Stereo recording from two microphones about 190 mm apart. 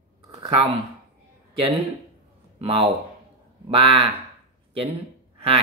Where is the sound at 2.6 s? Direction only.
30° right (ahead or behind).